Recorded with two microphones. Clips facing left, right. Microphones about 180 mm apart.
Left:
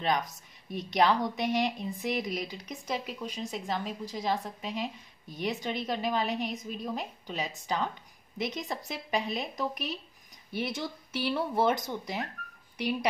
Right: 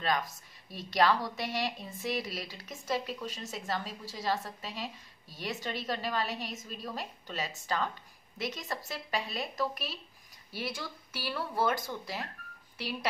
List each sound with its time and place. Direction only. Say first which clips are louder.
0.0 s speech: left 2 dB; 20° left (ahead or behind)